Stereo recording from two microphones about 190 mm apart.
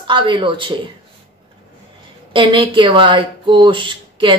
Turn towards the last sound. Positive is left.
turn(degrees=-25)  # may be behind; listen again after turning